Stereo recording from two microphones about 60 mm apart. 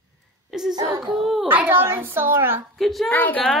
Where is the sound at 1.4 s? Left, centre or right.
Right.